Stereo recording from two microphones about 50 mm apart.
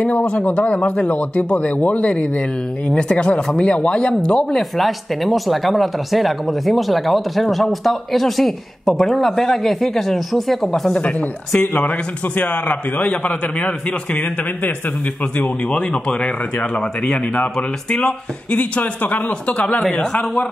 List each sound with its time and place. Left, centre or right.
0.0 s speech: left
4.5 s speech: centre
11.0 s a man's voice: left
12.4 s speech: left
15.7 s speech: left
18.8 s a man's voice: left
19.9 s speech: centre